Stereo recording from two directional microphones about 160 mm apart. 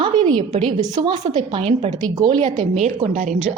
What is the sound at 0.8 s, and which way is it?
A woman's voice, 30° right (ahead or behind).